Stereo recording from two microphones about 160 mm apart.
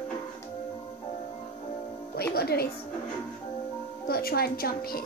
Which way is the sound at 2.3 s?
75° left (ahead or behind).